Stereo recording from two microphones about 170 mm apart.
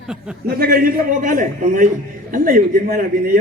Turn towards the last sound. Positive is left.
turn(degrees=-60)  # may be behind; listen again after turning